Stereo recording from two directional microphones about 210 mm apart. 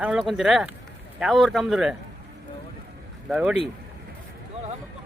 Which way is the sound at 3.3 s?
5° right (ahead or behind).